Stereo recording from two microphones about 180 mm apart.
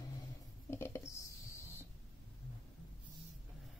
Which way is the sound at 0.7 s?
15° left (ahead or behind).